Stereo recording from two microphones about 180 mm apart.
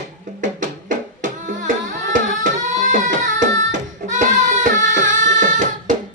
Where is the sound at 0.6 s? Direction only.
45° right (ahead or behind).